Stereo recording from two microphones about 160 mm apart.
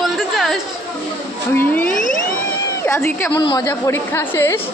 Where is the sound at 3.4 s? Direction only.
25° left (ahead or behind).